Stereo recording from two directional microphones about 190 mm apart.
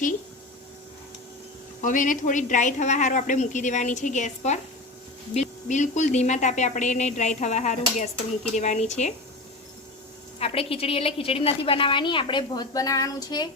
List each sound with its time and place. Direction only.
1.8 s a woman's voice: 45° left (ahead or behind)
10.4 s a woman's voice: 30° left (ahead or behind)